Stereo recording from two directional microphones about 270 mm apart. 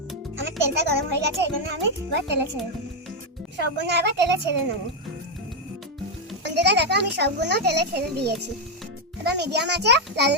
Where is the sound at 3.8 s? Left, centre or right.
Right.